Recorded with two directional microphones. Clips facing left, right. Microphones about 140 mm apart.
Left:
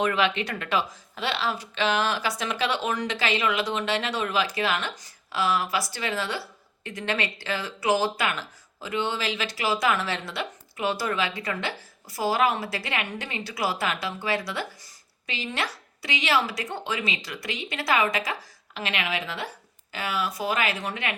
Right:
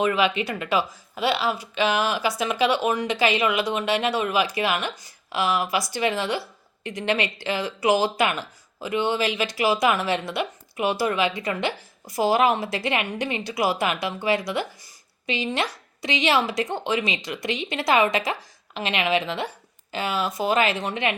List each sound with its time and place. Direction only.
0.0 s speech: 5° right (ahead or behind)